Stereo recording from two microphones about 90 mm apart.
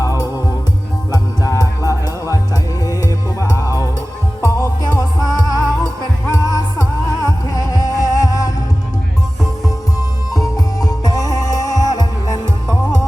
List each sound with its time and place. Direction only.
0.0 s music: 40° left (ahead or behind)
10.3 s music: 45° left (ahead or behind)